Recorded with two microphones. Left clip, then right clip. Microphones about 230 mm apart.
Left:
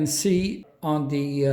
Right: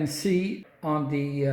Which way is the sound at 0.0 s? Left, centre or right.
Left.